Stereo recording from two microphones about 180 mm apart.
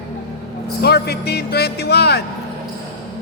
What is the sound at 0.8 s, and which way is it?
Speech, 65° left (ahead or behind).